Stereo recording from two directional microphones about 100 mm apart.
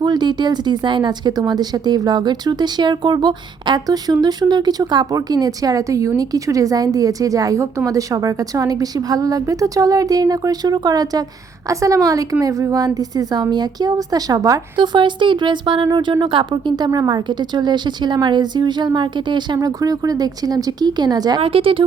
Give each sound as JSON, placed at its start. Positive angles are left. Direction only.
{"t": 0.0, "sound": "a woman's voice", "side_deg": -45}
{"t": 14.8, "sound": "speech", "side_deg": -50}
{"t": 19.6, "sound": "a woman's voice", "side_deg": -40}
{"t": 21.4, "sound": "a woman's voice", "side_deg": -65}